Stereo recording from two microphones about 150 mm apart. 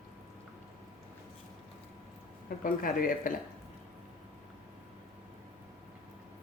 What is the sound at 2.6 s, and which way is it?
Speech, 70° left (ahead or behind).